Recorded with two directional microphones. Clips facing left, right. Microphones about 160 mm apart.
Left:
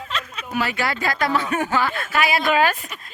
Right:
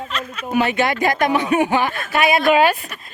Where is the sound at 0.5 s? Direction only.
20° right (ahead or behind).